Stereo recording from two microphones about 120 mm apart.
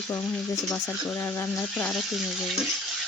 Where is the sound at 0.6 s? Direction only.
10° left (ahead or behind).